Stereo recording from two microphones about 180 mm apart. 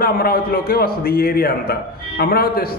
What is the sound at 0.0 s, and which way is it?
A man's voice, 55° left (ahead or behind).